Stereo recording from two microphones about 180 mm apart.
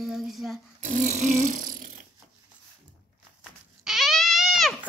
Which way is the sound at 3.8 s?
Centre (ahead or behind).